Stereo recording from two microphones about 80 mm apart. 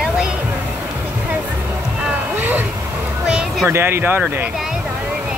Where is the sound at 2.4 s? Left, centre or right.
Right.